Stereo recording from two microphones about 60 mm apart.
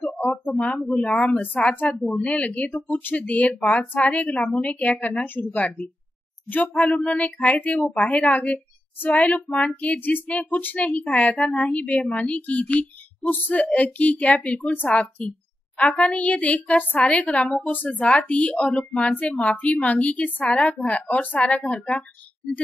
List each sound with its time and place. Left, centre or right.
0.3 s speech: centre
1.4 s a woman's voice: left
2.1 s female singing: left
2.4 s a woman's voice: left
7.4 s a woman's voice: left
9.8 s female singing: left
10.2 s a woman's voice: left